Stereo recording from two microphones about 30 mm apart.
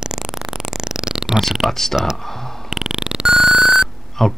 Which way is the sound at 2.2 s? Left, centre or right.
Centre.